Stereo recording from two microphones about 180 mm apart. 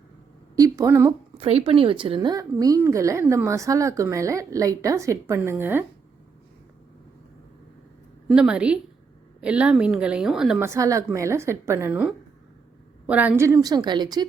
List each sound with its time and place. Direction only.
0.5 s a woman's voice: 20° right (ahead or behind)
1.4 s a woman's voice: 35° right (ahead or behind); by 5.8 s 10° right (ahead or behind)
8.3 s a woman's voice: 5° right (ahead or behind)
10.6 s a woman's voice: 15° right (ahead or behind)